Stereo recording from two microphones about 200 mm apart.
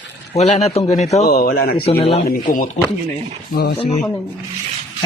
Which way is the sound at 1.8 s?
25° left (ahead or behind).